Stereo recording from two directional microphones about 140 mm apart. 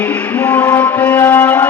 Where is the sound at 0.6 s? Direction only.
10° left (ahead or behind).